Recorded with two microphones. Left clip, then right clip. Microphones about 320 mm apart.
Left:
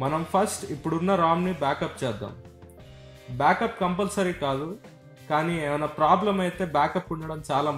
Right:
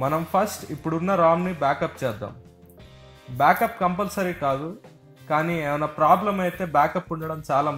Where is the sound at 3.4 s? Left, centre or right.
Centre.